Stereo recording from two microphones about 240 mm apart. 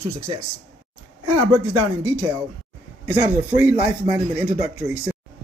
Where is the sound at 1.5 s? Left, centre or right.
Centre.